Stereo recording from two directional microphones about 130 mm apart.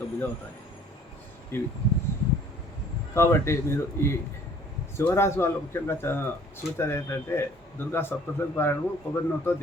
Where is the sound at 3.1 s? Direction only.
20° left (ahead or behind).